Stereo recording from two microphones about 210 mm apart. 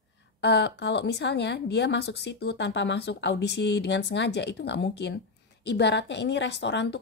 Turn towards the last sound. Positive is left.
turn(degrees=55)  # may be behind; listen again after turning